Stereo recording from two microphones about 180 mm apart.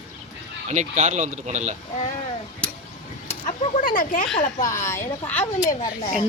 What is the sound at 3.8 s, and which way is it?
Speech, 50° left (ahead or behind).